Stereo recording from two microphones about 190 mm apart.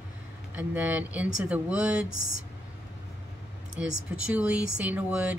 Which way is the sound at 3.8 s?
5° right (ahead or behind).